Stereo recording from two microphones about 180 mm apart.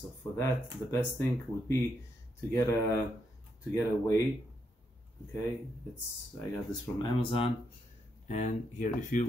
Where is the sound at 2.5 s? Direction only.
15° left (ahead or behind).